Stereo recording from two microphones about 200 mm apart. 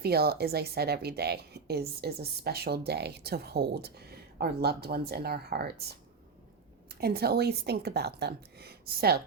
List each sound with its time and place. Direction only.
0.0 s a woman's voice: 50° right (ahead or behind)
7.0 s a woman's voice: 50° right (ahead or behind)